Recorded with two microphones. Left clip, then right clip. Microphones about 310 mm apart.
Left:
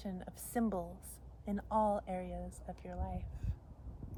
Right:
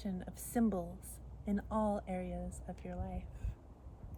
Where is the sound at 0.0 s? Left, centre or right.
Centre.